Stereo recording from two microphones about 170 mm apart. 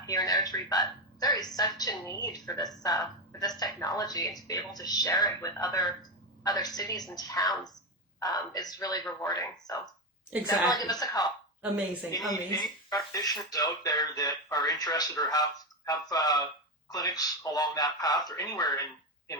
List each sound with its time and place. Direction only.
0.0 s speech: 20° left (ahead or behind)
12.3 s speech: 25° left (ahead or behind)